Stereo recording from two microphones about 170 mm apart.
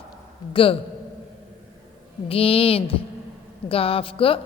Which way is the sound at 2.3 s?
35° left (ahead or behind).